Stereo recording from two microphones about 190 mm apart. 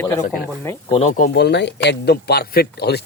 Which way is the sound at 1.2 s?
60° left (ahead or behind).